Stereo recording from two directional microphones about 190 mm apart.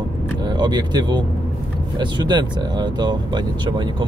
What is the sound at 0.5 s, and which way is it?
Speech, 20° right (ahead or behind).